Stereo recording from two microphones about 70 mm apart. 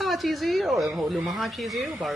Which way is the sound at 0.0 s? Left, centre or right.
Centre.